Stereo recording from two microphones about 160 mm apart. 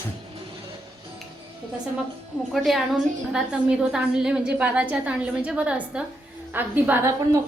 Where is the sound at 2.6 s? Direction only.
Centre (ahead or behind).